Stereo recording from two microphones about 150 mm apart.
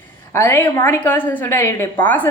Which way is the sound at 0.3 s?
15° left (ahead or behind).